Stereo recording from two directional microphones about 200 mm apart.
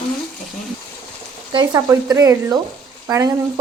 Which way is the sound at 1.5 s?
20° right (ahead or behind).